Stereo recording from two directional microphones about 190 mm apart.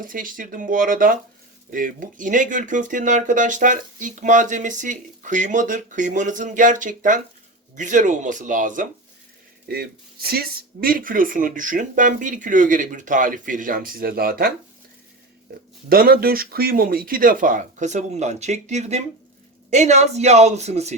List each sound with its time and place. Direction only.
0.0 s speech: 45° right (ahead or behind)
9.6 s speech: 55° right (ahead or behind)
15.9 s a woman's voice: 50° right (ahead or behind); by 20.9 s 35° right (ahead or behind)